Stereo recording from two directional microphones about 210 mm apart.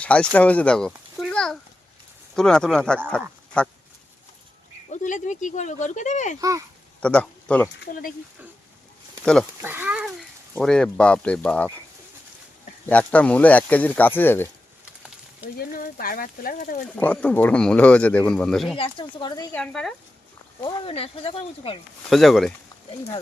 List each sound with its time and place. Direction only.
0.0 s speech: 5° left (ahead or behind)
4.9 s speech: 35° left (ahead or behind)
7.0 s speech: 5° left (ahead or behind)
7.8 s speech: 40° left (ahead or behind)
9.2 s speech: 5° left (ahead or behind)
9.6 s speech: 10° right (ahead or behind)
12.9 s speech: 5° left (ahead or behind)
15.5 s speech: 45° left (ahead or behind)
16.9 s speech: 5° left (ahead or behind)
18.8 s speech: 20° left (ahead or behind)
19.5 s speech: 5° left (ahead or behind)
20.6 s speech: 25° left (ahead or behind)
22.1 s speech: centre (ahead or behind)